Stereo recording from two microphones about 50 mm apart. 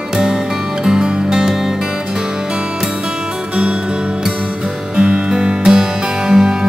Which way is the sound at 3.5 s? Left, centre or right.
Centre.